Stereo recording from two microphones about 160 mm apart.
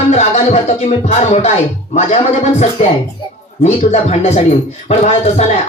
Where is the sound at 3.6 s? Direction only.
45° left (ahead or behind).